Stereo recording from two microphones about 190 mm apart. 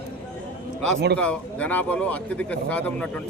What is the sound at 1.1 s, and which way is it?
Speech, 5° left (ahead or behind).